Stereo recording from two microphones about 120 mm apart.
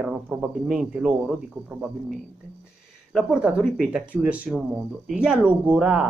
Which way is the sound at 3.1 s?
5° right (ahead or behind).